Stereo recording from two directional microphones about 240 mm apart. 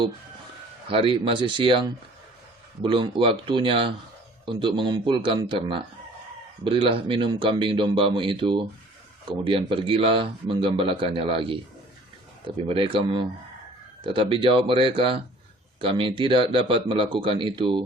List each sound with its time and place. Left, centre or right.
0.9 s speech: right